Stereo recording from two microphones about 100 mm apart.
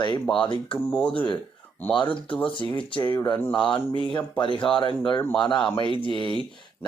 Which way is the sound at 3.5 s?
10° left (ahead or behind).